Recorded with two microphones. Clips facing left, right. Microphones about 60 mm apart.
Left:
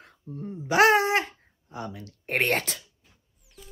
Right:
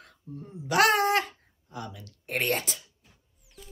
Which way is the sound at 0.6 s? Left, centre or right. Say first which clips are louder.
Left 3 dB; left.